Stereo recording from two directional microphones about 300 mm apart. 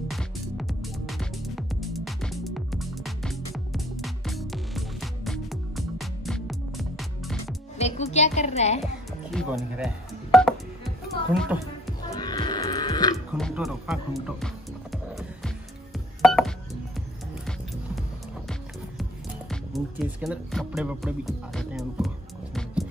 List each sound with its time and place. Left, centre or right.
0.1 s music: centre
7.7 s speech: left
9.3 s telephone dialing: centre
11.3 s speech: centre
12.1 s music: centre
13.3 s speech: centre
14.2 s music: centre
19.5 s music: centre